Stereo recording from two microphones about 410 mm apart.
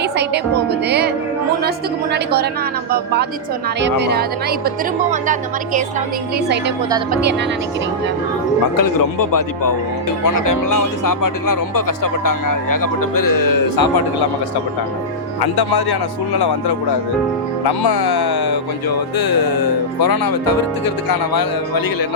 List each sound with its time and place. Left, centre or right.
0.7 s speech: right
2.1 s speech: right
3.8 s speech: right
8.8 s speech: left
15.5 s speech: left
17.8 s speech: left